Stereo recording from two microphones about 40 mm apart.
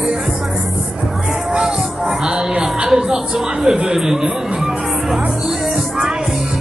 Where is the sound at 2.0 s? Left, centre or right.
Right.